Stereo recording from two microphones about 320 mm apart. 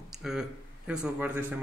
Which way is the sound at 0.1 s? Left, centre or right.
Centre.